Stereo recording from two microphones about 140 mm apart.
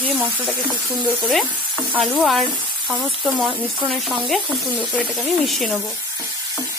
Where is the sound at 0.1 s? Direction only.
10° right (ahead or behind).